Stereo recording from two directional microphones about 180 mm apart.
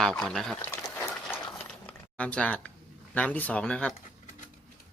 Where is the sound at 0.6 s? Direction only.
15° left (ahead or behind).